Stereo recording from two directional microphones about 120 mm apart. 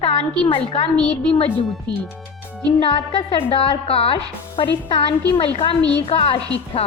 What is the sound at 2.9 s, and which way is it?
A woman's voice, 50° left (ahead or behind).